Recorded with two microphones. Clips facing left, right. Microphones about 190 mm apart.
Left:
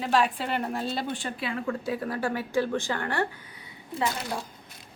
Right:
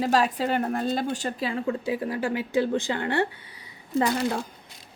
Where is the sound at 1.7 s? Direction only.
15° right (ahead or behind).